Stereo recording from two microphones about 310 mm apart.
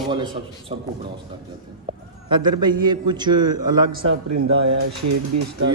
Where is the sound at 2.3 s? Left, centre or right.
Centre.